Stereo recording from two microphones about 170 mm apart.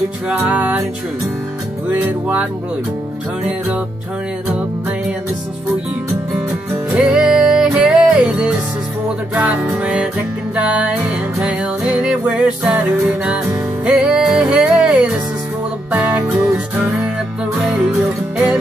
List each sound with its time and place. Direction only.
0.3 s music: 10° right (ahead or behind)
1.9 s music: 10° right (ahead or behind)
6.9 s music: 5° right (ahead or behind)